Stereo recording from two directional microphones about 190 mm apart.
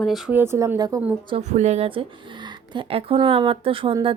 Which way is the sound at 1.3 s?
35° right (ahead or behind).